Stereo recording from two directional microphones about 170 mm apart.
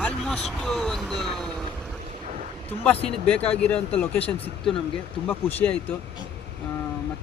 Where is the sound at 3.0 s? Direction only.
35° left (ahead or behind).